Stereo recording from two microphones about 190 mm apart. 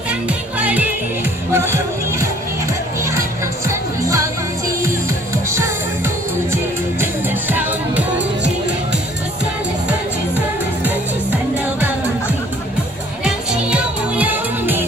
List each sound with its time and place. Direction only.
0.1 s music: 5° right (ahead or behind)
13.2 s music: 5° right (ahead or behind)